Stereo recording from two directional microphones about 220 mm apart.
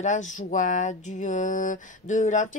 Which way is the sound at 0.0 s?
35° left (ahead or behind).